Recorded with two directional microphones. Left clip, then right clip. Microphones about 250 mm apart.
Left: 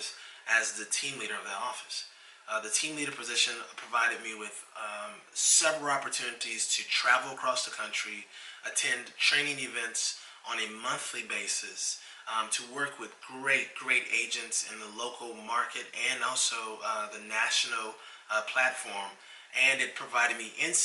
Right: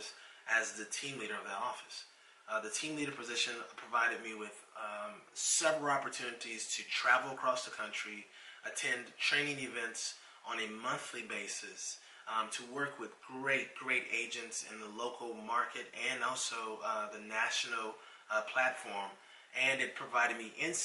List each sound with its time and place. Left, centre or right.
0.0 s a sound: centre
0.8 s speech: centre
15.1 s speech: right
15.4 s speech: centre